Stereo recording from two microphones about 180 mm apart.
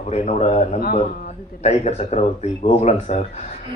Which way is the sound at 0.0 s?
35° left (ahead or behind).